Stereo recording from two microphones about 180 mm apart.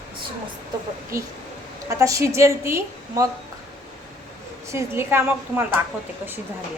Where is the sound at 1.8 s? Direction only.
15° right (ahead or behind).